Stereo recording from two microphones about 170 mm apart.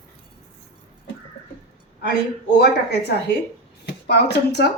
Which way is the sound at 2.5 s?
75° left (ahead or behind).